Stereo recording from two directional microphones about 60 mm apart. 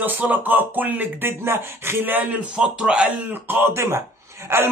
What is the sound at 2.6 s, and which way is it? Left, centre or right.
Speech, centre.